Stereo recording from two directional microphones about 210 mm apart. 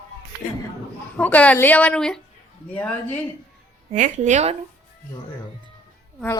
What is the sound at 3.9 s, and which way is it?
Speech, 35° right (ahead or behind).